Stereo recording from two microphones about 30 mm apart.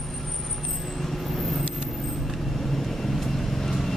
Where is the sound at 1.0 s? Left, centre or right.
Centre.